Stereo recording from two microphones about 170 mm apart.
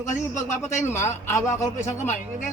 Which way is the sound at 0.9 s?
15° left (ahead or behind).